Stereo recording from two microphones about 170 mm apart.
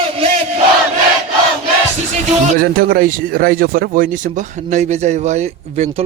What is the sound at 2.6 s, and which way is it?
Speech, 60° right (ahead or behind).